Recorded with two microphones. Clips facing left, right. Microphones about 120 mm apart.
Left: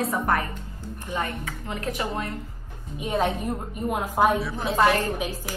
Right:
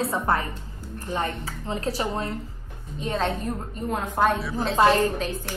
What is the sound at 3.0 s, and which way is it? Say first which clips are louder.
A woman's voice: left 1 dB; 10° left (ahead or behind).